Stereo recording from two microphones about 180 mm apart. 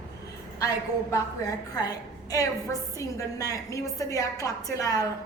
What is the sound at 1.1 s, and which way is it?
A woman's voice, 20° left (ahead or behind).